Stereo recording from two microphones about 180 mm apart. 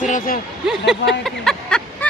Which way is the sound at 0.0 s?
45° left (ahead or behind).